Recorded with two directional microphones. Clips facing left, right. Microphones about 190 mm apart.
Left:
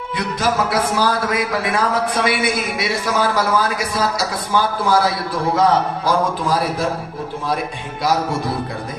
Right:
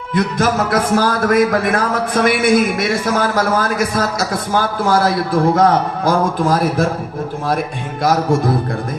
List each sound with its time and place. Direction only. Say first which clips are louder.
0.1 s speech: right 5 dB; 50° right (ahead or behind)